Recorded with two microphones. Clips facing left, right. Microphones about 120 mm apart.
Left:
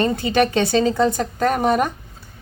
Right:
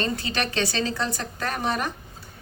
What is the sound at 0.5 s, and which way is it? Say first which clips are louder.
A woman's voice: left 9 dB; 50° left (ahead or behind).